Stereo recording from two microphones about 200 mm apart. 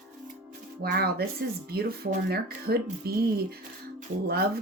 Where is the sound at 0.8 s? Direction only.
50° right (ahead or behind).